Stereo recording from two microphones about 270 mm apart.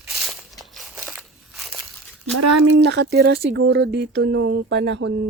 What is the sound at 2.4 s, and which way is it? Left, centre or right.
Speech, right.